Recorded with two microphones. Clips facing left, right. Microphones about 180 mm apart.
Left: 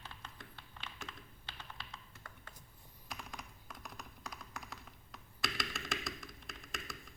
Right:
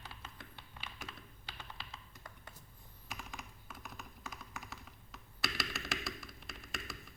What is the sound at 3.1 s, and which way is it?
Computer keyboard, centre (ahead or behind).